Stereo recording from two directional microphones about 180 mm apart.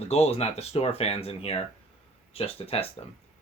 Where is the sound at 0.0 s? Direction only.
35° left (ahead or behind).